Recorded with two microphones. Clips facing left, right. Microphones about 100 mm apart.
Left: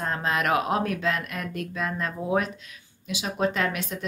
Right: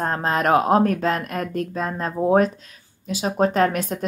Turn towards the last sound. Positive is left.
turn(degrees=-40)  # may be behind; listen again after turning